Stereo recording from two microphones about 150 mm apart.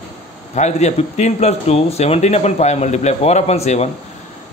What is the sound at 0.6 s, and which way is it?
Speech, 50° left (ahead or behind).